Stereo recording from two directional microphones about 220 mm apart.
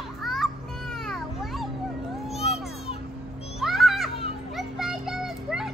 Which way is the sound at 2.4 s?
30° left (ahead or behind).